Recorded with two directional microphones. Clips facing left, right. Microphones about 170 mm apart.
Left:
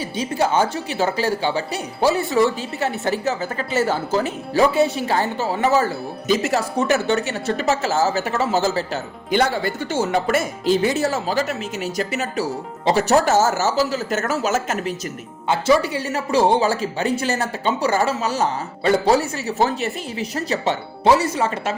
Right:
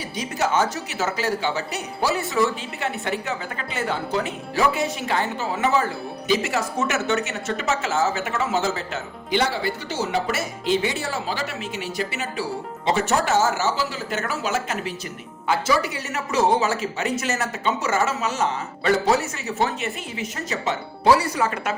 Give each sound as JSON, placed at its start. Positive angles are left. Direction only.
{"t": 0.2, "sound": "speech", "side_deg": 30}
{"t": 15.4, "sound": "speech", "side_deg": 25}
{"t": 21.0, "sound": "speech", "side_deg": 25}